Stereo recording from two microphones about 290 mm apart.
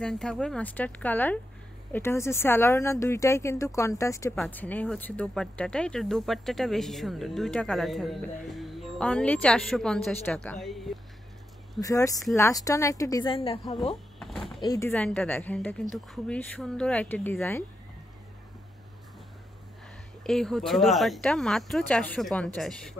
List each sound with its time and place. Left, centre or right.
0.0 s speech: centre
11.8 s speech: centre
14.2 s a sound: centre
14.6 s speech: centre
20.2 s speech: centre